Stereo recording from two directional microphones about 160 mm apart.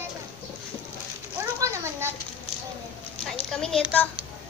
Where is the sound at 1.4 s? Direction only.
15° right (ahead or behind).